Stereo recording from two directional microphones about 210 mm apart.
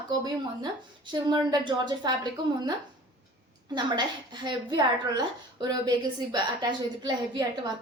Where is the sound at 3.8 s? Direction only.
20° right (ahead or behind).